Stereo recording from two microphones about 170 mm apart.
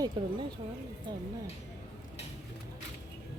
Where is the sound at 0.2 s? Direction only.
30° right (ahead or behind).